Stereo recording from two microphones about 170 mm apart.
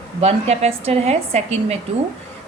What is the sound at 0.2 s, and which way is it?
A woman's voice, 40° right (ahead or behind).